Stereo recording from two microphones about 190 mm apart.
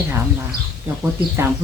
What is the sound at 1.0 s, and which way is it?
Speech, 15° right (ahead or behind).